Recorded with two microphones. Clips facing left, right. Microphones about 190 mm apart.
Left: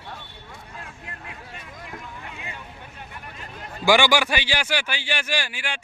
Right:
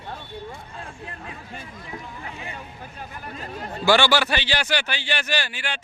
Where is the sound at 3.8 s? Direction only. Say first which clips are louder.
Even; 15° left (ahead or behind).